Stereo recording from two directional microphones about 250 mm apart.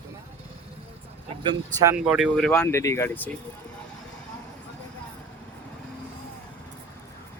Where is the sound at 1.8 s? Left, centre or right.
Centre.